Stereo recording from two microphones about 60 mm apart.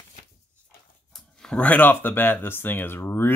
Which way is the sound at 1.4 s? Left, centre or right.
Left.